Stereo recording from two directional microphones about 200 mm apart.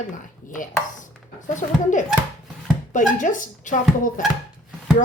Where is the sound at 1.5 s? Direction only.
40° left (ahead or behind).